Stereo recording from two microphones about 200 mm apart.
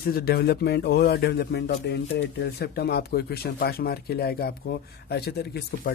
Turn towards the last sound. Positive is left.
turn(degrees=55)  # may be behind; listen again after turning